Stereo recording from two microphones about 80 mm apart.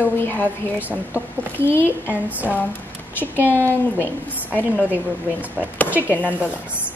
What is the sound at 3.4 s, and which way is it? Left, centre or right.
Speech, left.